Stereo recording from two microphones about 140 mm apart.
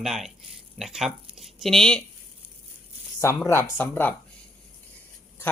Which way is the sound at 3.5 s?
15° left (ahead or behind).